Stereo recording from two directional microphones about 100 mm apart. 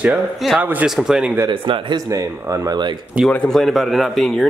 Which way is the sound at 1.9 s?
35° right (ahead or behind).